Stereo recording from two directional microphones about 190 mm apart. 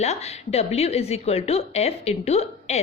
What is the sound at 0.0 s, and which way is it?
A woman's voice, 35° left (ahead or behind).